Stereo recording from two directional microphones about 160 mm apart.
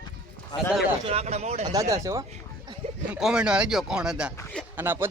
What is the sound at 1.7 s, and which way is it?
Speech, 20° right (ahead or behind).